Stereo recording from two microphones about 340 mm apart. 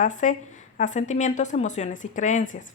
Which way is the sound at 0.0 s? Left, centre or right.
Left.